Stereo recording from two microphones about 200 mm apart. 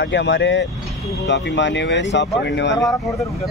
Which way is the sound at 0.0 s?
65° left (ahead or behind).